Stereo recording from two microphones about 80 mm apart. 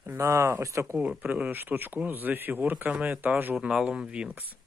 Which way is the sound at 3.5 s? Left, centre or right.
Centre.